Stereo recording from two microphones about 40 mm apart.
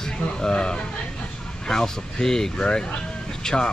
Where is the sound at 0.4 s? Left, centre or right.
Left.